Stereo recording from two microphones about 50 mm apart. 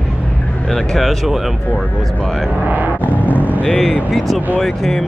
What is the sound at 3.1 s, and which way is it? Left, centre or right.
Vehicle, right.